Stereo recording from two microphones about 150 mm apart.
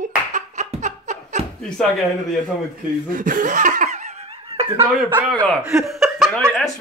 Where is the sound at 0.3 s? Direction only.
55° right (ahead or behind).